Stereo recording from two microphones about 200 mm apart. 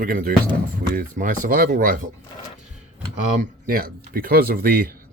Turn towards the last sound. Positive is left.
turn(degrees=-50)  # may be behind; listen again after turning